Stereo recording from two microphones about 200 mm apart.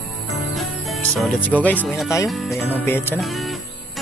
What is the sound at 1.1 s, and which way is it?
Speech, 5° left (ahead or behind).